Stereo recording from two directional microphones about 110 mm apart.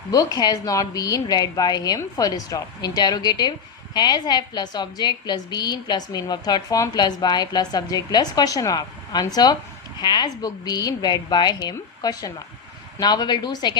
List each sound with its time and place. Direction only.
0.1 s a woman's voice: 35° left (ahead or behind)